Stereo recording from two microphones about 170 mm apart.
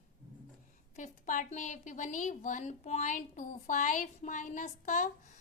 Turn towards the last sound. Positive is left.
turn(degrees=50)  # may be behind; listen again after turning